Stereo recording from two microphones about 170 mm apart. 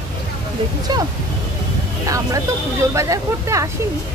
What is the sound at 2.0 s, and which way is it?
Speech, 20° right (ahead or behind).